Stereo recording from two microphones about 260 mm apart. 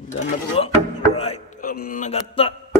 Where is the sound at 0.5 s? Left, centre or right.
Left.